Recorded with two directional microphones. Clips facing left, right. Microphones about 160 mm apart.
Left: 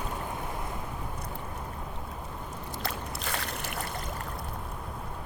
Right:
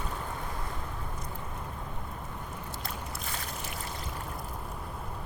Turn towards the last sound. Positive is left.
turn(degrees=70)  # may be behind; listen again after turning